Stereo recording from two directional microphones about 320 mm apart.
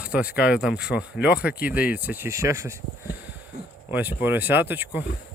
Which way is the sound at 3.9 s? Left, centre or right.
Centre.